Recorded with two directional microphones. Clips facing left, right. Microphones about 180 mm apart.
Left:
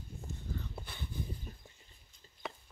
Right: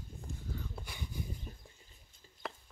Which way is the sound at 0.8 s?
10° right (ahead or behind).